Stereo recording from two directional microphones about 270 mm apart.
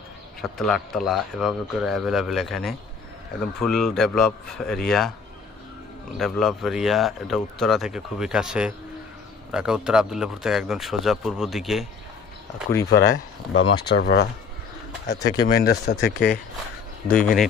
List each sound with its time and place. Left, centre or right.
0.4 s speech: centre
6.1 s speech: centre
13.1 s speech: left
17.1 s speech: centre